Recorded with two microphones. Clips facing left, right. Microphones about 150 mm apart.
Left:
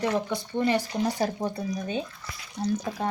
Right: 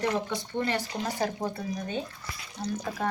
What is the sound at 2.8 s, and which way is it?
Speech, 20° left (ahead or behind).